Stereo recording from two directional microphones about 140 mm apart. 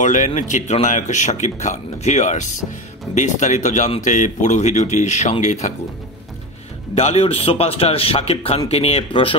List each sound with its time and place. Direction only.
0.0 s speech: 60° left (ahead or behind)
7.0 s a man's voice: 50° left (ahead or behind)